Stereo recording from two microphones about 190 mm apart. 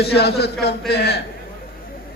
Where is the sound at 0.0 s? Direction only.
60° left (ahead or behind).